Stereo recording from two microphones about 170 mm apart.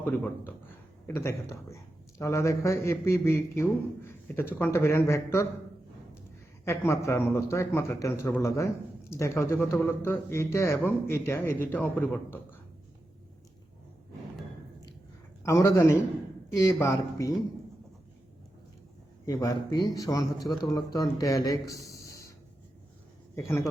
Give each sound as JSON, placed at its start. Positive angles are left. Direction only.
{"t": 1.0, "sound": "speech", "side_deg": 15}
{"t": 6.7, "sound": "speech", "side_deg": 15}
{"t": 15.4, "sound": "a man's voice", "side_deg": 15}
{"t": 19.2, "sound": "a man's voice", "side_deg": 20}